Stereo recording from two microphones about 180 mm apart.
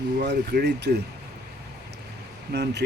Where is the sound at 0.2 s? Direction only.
70° right (ahead or behind).